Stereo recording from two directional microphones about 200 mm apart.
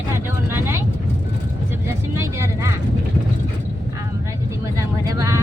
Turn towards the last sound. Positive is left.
turn(degrees=-20)  # may be behind; listen again after turning